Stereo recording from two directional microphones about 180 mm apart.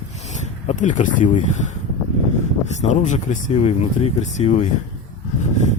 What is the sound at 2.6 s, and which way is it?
Speech, 40° left (ahead or behind).